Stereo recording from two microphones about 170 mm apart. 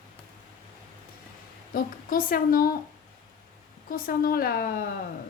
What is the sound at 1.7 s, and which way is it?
A woman's voice, 55° left (ahead or behind).